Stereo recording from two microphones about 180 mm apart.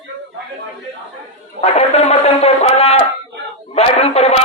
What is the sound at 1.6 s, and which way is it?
A man's voice, 35° left (ahead or behind).